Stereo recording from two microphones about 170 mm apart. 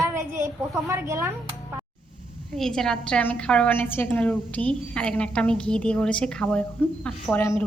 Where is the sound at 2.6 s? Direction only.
5° left (ahead or behind).